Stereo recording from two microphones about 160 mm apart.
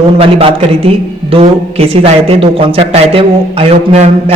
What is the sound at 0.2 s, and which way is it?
A man's voice, 35° right (ahead or behind).